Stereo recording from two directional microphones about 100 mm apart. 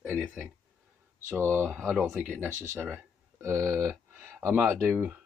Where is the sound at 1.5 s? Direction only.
20° right (ahead or behind).